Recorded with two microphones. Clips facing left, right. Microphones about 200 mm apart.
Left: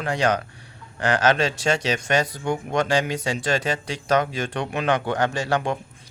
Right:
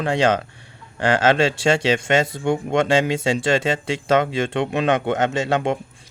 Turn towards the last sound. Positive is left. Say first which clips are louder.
# right 3 dB
turn(degrees=-25)  # may be behind; listen again after turning